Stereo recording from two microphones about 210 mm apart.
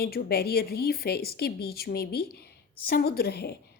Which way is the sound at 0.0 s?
45° left (ahead or behind).